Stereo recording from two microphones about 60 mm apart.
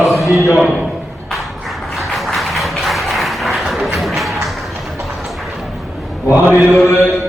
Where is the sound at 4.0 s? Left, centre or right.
Centre.